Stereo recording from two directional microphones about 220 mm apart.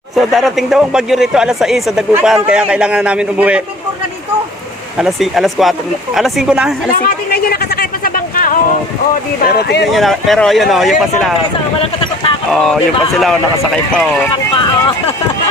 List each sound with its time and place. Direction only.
0.2 s speech: centre (ahead or behind)
4.9 s speech: centre (ahead or behind)
6.9 s a sound: 40° left (ahead or behind)
9.4 s speech: 45° left (ahead or behind)
9.9 s speech: centre (ahead or behind)
12.5 s speech: centre (ahead or behind)